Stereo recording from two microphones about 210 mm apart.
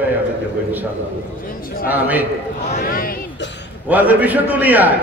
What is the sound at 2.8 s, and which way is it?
Speech, 45° left (ahead or behind).